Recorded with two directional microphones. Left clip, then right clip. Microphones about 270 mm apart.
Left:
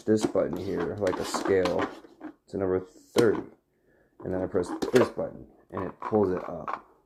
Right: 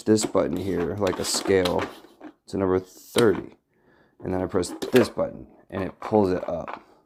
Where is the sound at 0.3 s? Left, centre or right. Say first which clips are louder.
Right 4 dB; right.